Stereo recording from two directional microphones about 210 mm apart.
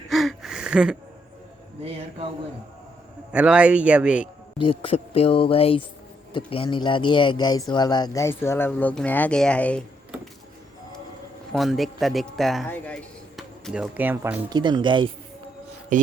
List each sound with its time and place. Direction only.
0.1 s a sound: centre (ahead or behind)
1.8 s speech: 30° right (ahead or behind)
3.3 s speech: 5° right (ahead or behind)
4.5 s speech: 25° left (ahead or behind); by 9.8 s 5° left (ahead or behind)
11.5 s speech: centre (ahead or behind)
14.5 s speech: 20° right (ahead or behind)
15.9 s rub: 35° right (ahead or behind)